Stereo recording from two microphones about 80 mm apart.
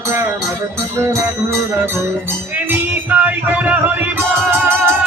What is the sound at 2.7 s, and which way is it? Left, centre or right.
Music, right.